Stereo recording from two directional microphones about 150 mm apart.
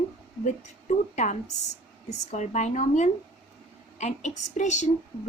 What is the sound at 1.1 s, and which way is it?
A woman's voice, 55° left (ahead or behind).